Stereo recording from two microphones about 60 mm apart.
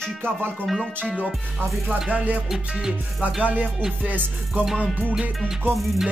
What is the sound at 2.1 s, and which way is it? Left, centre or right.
Music, right.